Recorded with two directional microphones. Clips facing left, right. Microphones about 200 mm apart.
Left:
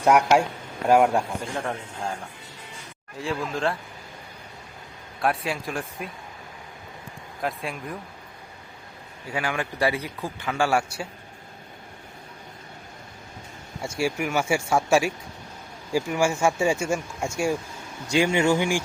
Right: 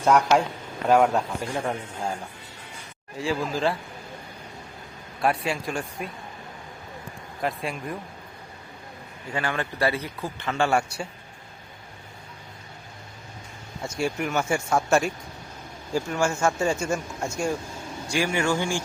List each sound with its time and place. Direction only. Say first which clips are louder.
0.0 s a man's voice: left 1 dB; 10° left (ahead or behind)
1.5 s a man's voice: right 2 dB; 5° right (ahead or behind)
3.2 s speech: right 2 dB; centre (ahead or behind)
5.2 s speech: right 1 dB; centre (ahead or behind)
7.4 s speech: right 1 dB; centre (ahead or behind)
9.3 s a man's voice: even; 10° left (ahead or behind)
13.8 s a man's voice: left 1 dB; 10° left (ahead or behind)